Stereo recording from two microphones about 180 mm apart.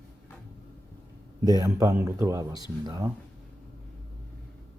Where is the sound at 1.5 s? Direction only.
20° right (ahead or behind).